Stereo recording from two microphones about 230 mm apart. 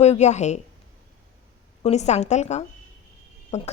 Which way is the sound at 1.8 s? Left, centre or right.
Left.